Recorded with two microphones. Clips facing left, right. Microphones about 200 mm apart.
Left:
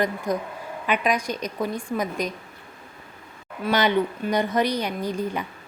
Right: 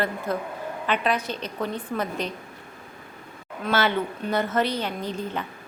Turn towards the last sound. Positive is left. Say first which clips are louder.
# left 3 dB
turn(degrees=10)  # may be behind; listen again after turning